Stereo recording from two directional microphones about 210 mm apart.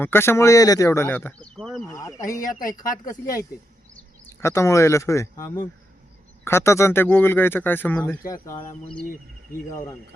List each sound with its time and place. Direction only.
0.0 s speech: 10° left (ahead or behind)
1.9 s speech: 15° left (ahead or behind)
2.6 s speech: 40° left (ahead or behind)
3.9 s speech: 10° left (ahead or behind)